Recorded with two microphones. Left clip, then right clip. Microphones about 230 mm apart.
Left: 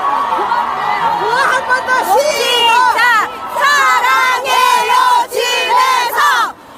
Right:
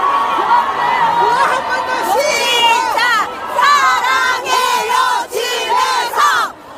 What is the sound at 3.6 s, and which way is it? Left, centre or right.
Crowd, centre.